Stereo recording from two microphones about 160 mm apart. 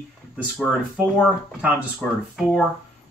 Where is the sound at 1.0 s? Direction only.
10° right (ahead or behind).